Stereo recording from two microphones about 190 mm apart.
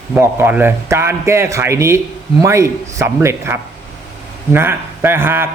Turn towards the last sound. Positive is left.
turn(degrees=-10)  # may be behind; listen again after turning